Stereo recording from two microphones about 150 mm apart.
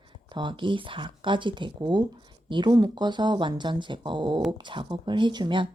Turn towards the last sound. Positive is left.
turn(degrees=-30)  # may be behind; listen again after turning